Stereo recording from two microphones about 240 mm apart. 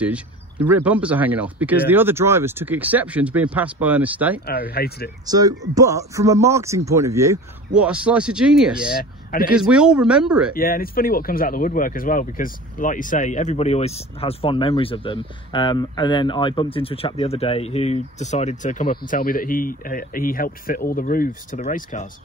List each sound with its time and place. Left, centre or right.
0.0 s speech: centre
4.6 s speech: left
5.2 s speech: centre
8.8 s speech: left
9.6 s speech: centre
10.5 s speech: left